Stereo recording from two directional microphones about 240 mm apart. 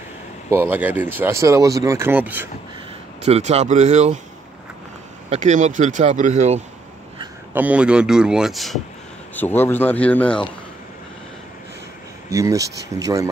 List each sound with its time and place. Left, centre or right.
0.5 s speech: centre
3.2 s speech: right
5.3 s speech: right
7.5 s a man's voice: centre
12.3 s speech: centre